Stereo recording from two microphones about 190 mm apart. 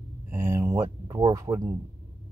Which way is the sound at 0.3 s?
15° right (ahead or behind).